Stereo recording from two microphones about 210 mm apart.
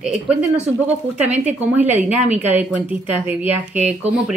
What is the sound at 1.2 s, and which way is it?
Speech, 30° right (ahead or behind).